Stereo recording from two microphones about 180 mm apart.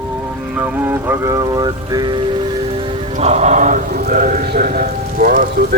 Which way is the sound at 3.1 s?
40° right (ahead or behind).